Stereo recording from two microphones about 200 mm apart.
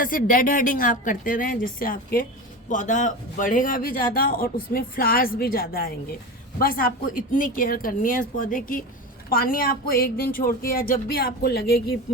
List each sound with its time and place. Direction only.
0.0 s speech: 45° left (ahead or behind)